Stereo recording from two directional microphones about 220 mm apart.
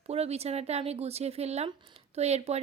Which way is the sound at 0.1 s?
30° right (ahead or behind).